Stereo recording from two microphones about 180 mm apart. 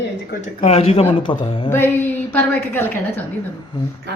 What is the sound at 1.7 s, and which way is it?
A woman's voice, 10° left (ahead or behind).